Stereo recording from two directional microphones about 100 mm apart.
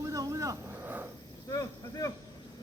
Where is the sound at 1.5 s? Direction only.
35° left (ahead or behind).